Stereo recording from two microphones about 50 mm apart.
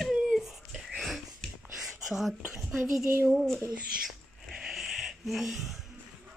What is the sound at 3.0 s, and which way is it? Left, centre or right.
Speech, right.